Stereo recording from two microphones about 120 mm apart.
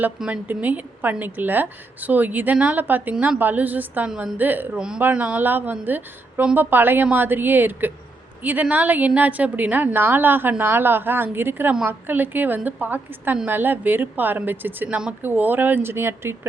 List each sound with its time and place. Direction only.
0.2 s a woman's voice: 10° right (ahead or behind)